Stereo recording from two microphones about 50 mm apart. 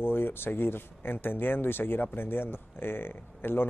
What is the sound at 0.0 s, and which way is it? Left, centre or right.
A man's voice, left.